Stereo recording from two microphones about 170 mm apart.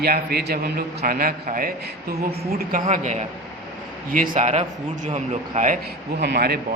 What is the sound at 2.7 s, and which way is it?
A man's voice, 50° right (ahead or behind).